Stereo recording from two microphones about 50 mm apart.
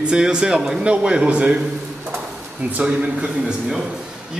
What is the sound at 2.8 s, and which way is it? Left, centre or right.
Speech, right.